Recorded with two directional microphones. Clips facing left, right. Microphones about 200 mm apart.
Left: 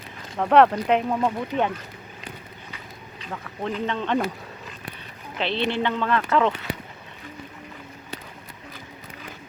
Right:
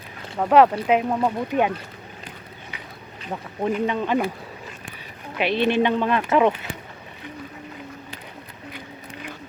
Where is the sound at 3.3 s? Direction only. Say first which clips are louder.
Right 5 dB; 10° right (ahead or behind).